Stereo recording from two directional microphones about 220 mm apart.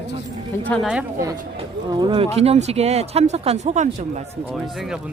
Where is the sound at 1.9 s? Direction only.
20° right (ahead or behind).